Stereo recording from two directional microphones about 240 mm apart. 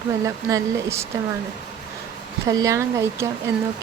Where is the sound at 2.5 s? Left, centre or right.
Centre.